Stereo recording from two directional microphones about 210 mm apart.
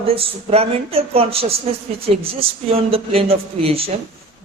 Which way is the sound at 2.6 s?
25° right (ahead or behind).